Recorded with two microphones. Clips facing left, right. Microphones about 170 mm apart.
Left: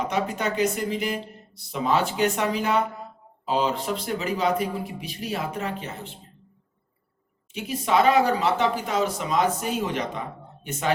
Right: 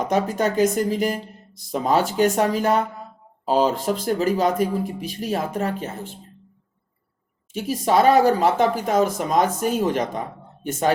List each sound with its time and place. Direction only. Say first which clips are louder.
0.1 s speech: right 5 dB; 45° right (ahead or behind)
7.5 s speech: right 3 dB; 40° right (ahead or behind)